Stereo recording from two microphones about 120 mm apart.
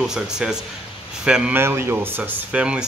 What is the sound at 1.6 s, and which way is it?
Speech, 20° right (ahead or behind).